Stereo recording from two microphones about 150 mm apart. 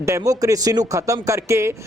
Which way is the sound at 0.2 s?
20° right (ahead or behind).